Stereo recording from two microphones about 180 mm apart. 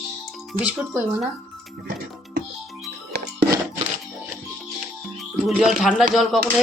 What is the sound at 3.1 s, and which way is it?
Music, 65° right (ahead or behind).